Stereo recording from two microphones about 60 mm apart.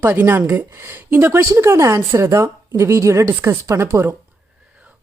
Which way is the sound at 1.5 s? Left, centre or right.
Right.